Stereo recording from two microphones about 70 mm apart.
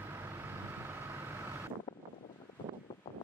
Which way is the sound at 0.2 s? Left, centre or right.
Right.